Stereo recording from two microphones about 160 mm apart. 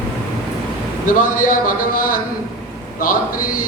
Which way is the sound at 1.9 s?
60° left (ahead or behind).